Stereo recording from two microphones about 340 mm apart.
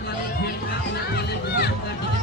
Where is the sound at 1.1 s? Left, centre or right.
Left.